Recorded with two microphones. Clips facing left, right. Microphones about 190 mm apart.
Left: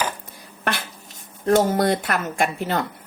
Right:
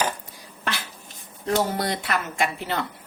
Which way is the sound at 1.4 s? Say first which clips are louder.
Left 6 dB; 50° left (ahead or behind).